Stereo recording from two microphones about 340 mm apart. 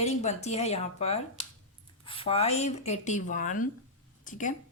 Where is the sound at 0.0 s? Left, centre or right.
Centre.